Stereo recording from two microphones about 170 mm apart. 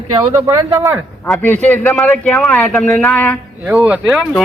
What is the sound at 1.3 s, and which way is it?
A man's voice, 10° left (ahead or behind).